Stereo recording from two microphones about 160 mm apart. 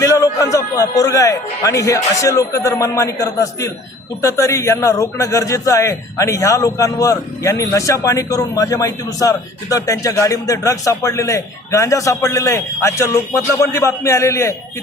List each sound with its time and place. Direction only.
0.0 s music: 20° left (ahead or behind)
0.5 s a man's voice: 20° left (ahead or behind)